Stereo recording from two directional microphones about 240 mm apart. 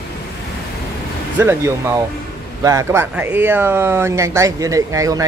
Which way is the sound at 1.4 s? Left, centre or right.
Centre.